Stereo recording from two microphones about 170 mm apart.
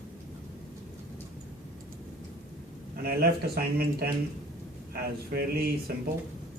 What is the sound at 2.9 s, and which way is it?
A man's voice, 65° right (ahead or behind).